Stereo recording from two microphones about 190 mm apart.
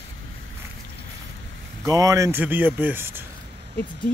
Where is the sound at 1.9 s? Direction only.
20° right (ahead or behind).